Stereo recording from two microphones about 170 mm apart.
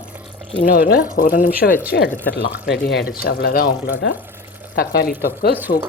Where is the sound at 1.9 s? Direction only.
70° left (ahead or behind).